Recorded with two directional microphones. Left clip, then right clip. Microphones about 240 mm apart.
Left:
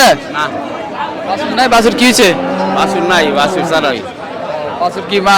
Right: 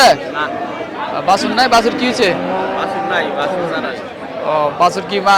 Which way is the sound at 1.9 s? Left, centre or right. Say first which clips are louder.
Left 6 dB; left.